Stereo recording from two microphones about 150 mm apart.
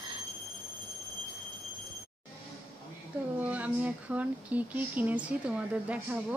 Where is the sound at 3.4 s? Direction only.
10° right (ahead or behind).